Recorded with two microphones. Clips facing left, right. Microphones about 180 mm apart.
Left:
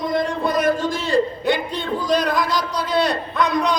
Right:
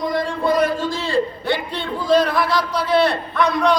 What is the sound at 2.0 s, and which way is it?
Speech, 20° left (ahead or behind).